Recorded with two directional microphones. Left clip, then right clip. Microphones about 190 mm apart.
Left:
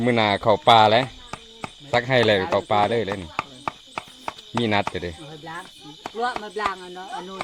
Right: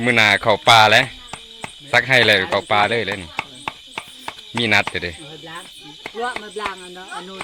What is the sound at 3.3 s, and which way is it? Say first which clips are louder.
Chopping: right 2 dB; 35° left (ahead or behind).